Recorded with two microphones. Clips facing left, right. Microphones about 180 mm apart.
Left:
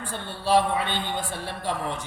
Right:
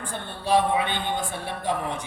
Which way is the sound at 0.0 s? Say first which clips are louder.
Left 1 dB; 15° right (ahead or behind).